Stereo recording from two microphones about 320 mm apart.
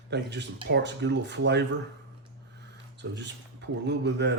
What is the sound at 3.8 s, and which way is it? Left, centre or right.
Speech, right.